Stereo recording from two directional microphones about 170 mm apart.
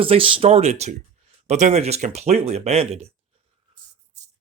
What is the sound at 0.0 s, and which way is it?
Speech, 30° right (ahead or behind).